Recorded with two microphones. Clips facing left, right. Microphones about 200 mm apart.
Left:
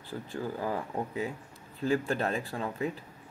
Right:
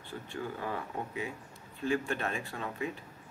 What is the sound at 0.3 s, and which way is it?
Speech, 35° left (ahead or behind).